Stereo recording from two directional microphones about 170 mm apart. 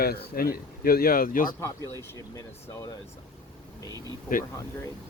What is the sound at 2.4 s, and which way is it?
Speech, 15° left (ahead or behind).